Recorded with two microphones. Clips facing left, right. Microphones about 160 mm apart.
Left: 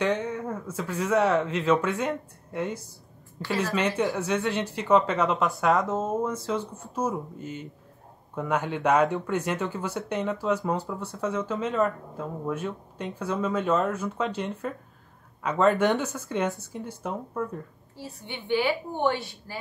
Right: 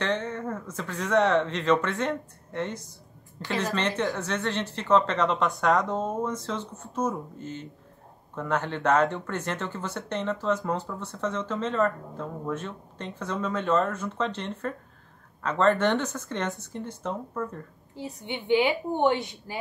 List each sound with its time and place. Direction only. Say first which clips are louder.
0.0 s speech: left 2 dB; 10° left (ahead or behind)
17.9 s a woman's voice: right 4 dB; 20° right (ahead or behind)